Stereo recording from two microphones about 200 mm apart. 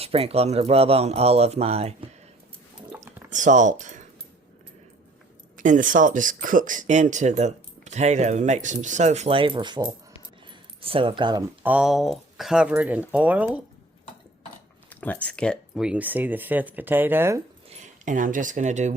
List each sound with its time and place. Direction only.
0.0 s speech: 30° right (ahead or behind)
3.2 s speech: 40° right (ahead or behind)
5.5 s speech: 40° right (ahead or behind); by 11.4 s 25° right (ahead or behind)
11.6 s speech: 5° right (ahead or behind)
14.8 s speech: 10° left (ahead or behind); by 17.4 s 10° right (ahead or behind)
17.7 s speech: 35° right (ahead or behind)